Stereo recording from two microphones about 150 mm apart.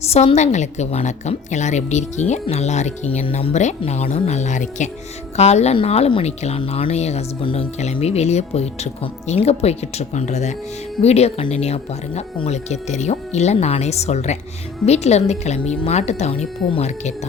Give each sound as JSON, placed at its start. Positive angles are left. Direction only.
{"t": 0.0, "sound": "a woman's voice", "side_deg": 45}